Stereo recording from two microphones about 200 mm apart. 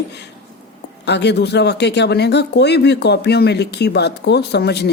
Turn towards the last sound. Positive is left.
turn(degrees=55)  # may be behind; listen again after turning